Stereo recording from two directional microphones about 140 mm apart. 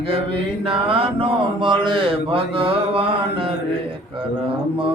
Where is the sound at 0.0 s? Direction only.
40° right (ahead or behind).